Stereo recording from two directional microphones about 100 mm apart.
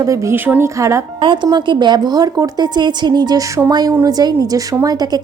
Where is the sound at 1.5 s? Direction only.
50° right (ahead or behind).